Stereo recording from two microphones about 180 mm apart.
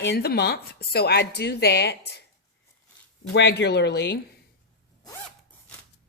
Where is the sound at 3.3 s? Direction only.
70° left (ahead or behind).